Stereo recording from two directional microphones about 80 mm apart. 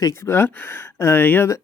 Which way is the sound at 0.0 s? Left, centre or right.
Left.